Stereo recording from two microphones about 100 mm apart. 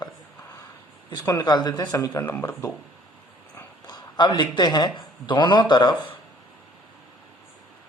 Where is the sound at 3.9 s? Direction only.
45° left (ahead or behind).